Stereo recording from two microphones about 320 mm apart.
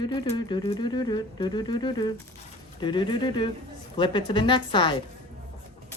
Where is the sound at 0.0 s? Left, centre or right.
Centre.